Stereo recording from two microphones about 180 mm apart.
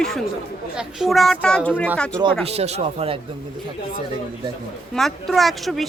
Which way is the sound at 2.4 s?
35° right (ahead or behind).